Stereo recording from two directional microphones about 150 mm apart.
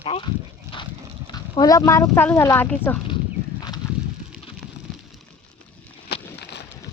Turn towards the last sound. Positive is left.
turn(degrees=90)